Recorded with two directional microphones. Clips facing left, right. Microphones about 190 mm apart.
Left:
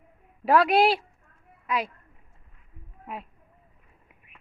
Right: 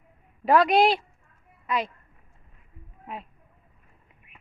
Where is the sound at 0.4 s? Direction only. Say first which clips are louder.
Right 1 dB; 5° left (ahead or behind).